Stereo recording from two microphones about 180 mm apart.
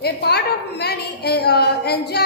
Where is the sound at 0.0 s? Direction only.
65° left (ahead or behind).